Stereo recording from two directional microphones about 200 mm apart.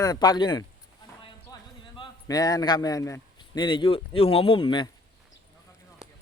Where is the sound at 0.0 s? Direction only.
20° left (ahead or behind).